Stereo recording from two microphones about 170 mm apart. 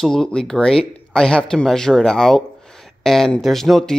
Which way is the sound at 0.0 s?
5° left (ahead or behind).